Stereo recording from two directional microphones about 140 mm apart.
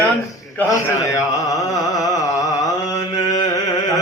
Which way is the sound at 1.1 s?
25° left (ahead or behind).